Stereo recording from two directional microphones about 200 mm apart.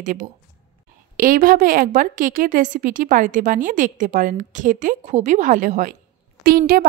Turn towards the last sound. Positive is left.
turn(degrees=-45)  # may be behind; listen again after turning